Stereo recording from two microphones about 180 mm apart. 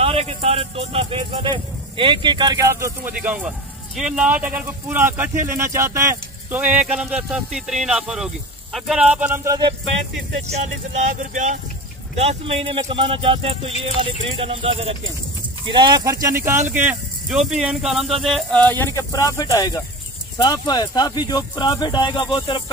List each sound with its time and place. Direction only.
0.0 s speech: 35° right (ahead or behind); by 9.6 s 15° right (ahead or behind)
10.5 s speech: 40° right (ahead or behind); by 22.6 s 25° left (ahead or behind)